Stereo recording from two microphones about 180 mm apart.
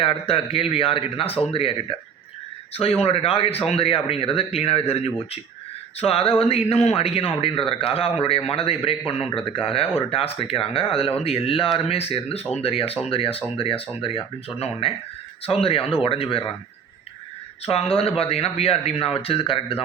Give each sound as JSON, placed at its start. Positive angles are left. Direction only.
{"t": 0.0, "sound": "a man's voice", "side_deg": 30}
{"t": 2.7, "sound": "a man's voice", "side_deg": 35}
{"t": 17.7, "sound": "a man's voice", "side_deg": 35}